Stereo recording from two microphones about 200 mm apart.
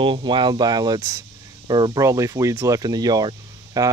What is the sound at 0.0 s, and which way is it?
Speech, 25° right (ahead or behind).